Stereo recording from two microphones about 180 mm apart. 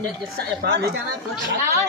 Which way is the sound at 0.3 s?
65° right (ahead or behind).